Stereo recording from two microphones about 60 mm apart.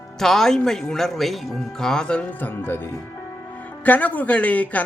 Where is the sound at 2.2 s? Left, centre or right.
Left.